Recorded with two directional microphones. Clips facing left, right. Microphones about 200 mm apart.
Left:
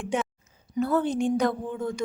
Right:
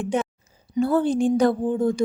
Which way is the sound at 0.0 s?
35° right (ahead or behind).